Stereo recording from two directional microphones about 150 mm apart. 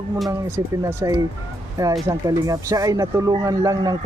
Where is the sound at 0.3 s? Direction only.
20° right (ahead or behind).